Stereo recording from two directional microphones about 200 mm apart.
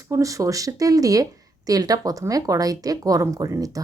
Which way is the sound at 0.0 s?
15° right (ahead or behind).